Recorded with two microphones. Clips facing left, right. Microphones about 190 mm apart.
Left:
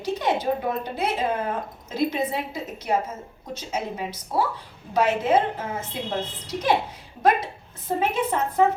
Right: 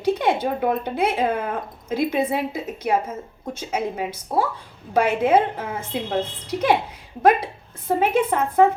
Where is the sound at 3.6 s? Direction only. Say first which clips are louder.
Right 4 dB; 55° right (ahead or behind).